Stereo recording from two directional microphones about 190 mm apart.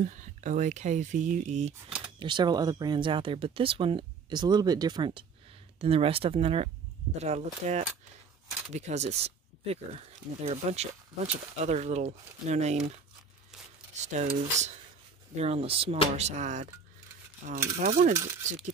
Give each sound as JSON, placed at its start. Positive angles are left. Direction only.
{"t": 0.0, "sound": "speech", "side_deg": -40}
{"t": 2.1, "sound": "speech", "side_deg": -25}
{"t": 14.0, "sound": "speech", "side_deg": -40}